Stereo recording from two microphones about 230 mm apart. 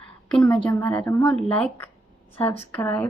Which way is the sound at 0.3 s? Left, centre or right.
Centre.